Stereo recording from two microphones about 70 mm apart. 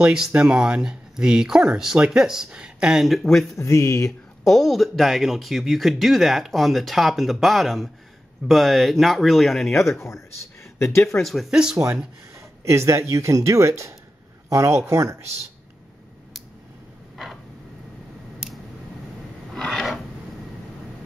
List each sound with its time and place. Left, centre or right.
0.0 s speech: centre
3.5 s speech: left
4.5 s speech: centre
9.8 s speech: left
11.1 s speech: centre
12.4 s speech: right
19.5 s filing: centre